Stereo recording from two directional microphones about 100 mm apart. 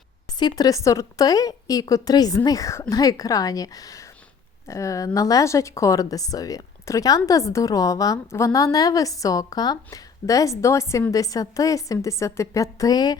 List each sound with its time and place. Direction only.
0.3 s a woman's voice: 40° left (ahead or behind)
12.8 s a woman's voice: 40° left (ahead or behind)